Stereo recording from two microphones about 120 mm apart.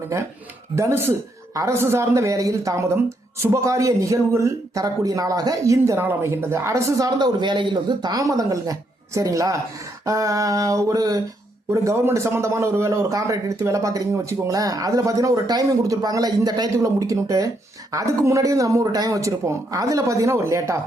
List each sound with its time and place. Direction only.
0.8 s a man's voice: 20° right (ahead or behind)
7.2 s a man's voice: 40° right (ahead or behind); by 20.7 s 25° right (ahead or behind)